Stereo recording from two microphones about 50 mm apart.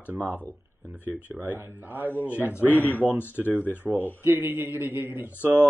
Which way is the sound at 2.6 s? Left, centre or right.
Left.